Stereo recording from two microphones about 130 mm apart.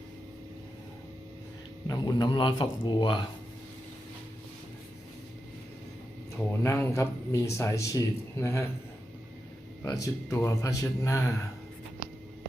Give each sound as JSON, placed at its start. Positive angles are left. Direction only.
{"t": 1.9, "sound": "speech", "side_deg": 30}
{"t": 6.3, "sound": "speech", "side_deg": 20}
{"t": 9.8, "sound": "speech", "side_deg": 25}